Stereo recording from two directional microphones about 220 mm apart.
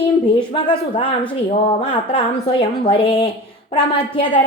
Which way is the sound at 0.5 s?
20° left (ahead or behind).